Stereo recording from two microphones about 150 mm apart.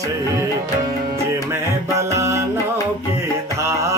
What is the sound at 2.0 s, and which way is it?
Music, 20° right (ahead or behind).